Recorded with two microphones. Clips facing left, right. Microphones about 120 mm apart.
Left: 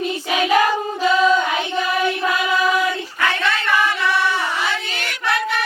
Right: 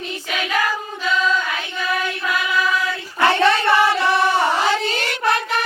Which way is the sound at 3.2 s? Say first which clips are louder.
Right 8 dB; 30° right (ahead or behind).